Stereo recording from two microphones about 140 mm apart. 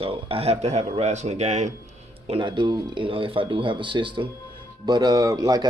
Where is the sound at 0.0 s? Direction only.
40° right (ahead or behind).